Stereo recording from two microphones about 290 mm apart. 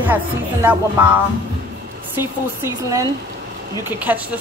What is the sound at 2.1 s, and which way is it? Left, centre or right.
Speech, centre.